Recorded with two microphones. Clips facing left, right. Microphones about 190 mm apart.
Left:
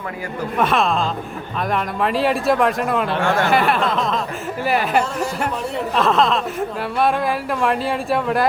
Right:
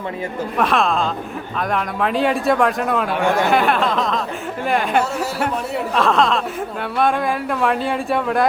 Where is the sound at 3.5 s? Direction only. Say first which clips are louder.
Right 1 dB; centre (ahead or behind).